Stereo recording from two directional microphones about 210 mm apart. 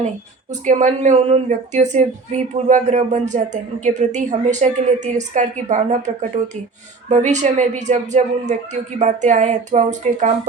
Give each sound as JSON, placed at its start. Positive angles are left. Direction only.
{"t": 0.6, "sound": "a woman's voice", "side_deg": -35}